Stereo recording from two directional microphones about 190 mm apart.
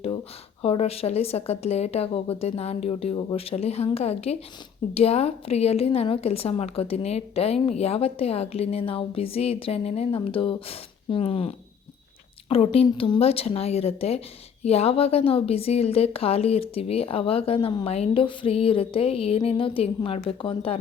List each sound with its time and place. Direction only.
0.6 s a woman's voice: 30° left (ahead or behind)